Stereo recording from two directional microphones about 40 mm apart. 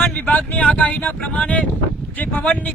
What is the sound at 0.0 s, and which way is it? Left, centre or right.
Speech, left.